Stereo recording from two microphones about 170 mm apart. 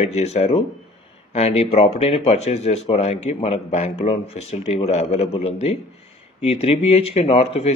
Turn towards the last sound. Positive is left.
turn(degrees=35)  # may be behind; listen again after turning